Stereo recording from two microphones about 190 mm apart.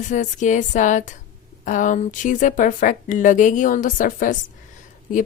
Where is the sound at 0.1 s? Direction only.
40° left (ahead or behind).